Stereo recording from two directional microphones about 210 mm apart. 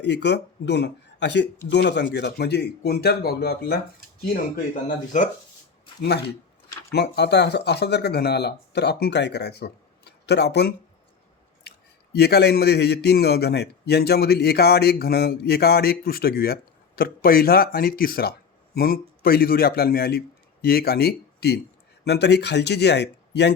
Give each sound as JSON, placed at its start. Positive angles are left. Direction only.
{"t": 0.0, "sound": "a man's voice", "side_deg": 55}
{"t": 6.9, "sound": "a man's voice", "side_deg": 50}
{"t": 12.1, "sound": "a man's voice", "side_deg": 50}